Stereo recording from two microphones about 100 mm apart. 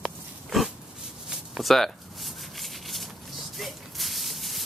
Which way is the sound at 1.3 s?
5° right (ahead or behind).